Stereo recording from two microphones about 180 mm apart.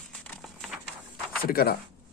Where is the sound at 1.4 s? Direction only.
55° left (ahead or behind).